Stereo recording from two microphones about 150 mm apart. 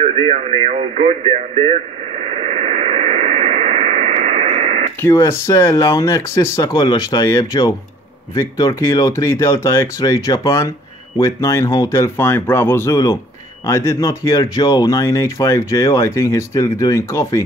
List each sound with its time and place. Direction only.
0.0 s radio: 50° right (ahead or behind)
5.0 s speech: 20° left (ahead or behind)